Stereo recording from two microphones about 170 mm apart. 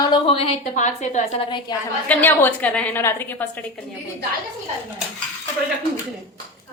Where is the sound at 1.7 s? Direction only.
25° left (ahead or behind).